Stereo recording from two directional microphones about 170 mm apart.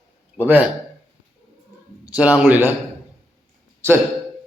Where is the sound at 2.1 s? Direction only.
10° right (ahead or behind).